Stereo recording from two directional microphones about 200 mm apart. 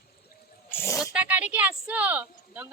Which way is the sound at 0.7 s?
10° left (ahead or behind).